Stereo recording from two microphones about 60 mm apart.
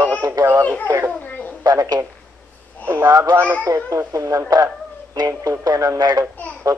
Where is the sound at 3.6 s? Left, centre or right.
Right.